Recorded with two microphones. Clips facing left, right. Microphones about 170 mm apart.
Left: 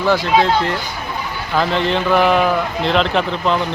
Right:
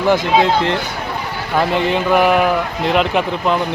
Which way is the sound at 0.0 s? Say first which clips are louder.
Right 1 dB; 20° right (ahead or behind).